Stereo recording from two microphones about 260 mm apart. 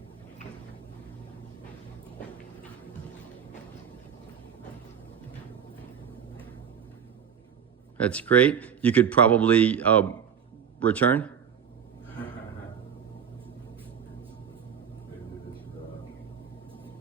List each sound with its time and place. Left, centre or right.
8.0 s speech: centre